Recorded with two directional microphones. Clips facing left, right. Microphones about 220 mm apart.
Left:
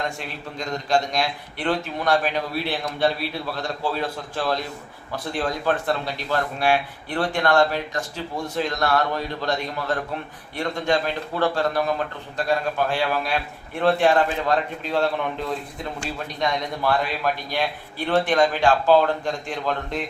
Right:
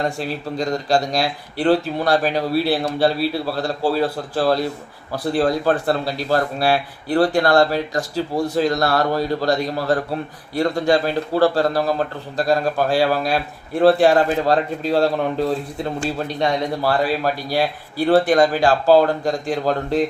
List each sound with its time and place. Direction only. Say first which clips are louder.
0.0 s speech: right 7 dB; 35° right (ahead or behind)